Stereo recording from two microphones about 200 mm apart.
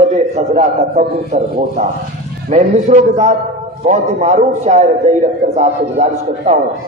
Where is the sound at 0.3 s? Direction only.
35° right (ahead or behind).